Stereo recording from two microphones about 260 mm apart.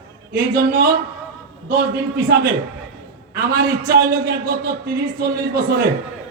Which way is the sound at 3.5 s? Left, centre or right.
Right.